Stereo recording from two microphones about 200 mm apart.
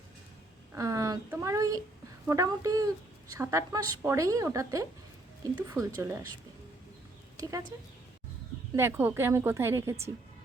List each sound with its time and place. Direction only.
0.7 s a woman's voice: 15° right (ahead or behind)
7.3 s speech: 15° right (ahead or behind)
8.7 s a woman's voice: 10° right (ahead or behind)